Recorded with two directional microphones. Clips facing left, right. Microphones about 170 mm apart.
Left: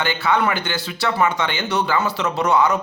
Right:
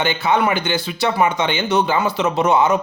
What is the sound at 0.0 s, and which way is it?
A man's voice, 20° right (ahead or behind).